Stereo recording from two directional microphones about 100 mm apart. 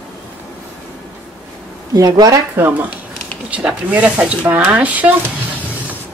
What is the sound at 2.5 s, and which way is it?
Speech, 20° right (ahead or behind).